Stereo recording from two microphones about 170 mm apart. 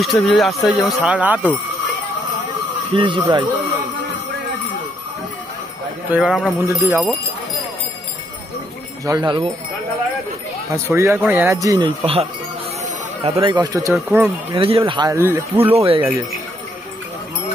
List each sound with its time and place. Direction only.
0.0 s speech: centre (ahead or behind)
2.9 s speech: 30° right (ahead or behind)
6.0 s speech: 5° right (ahead or behind)
6.6 s speech: 15° right (ahead or behind)
9.0 s speech: 20° right (ahead or behind)
10.7 s speech: 15° right (ahead or behind)
12.0 s speech: 35° right (ahead or behind)
15.1 s speech: 15° right (ahead or behind)
15.7 s speech: 35° right (ahead or behind)
16.0 s speech: 10° right (ahead or behind)